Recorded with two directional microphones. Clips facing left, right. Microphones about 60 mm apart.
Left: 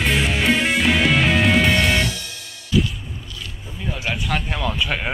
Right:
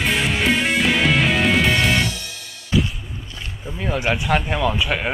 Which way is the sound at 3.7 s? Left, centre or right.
Right.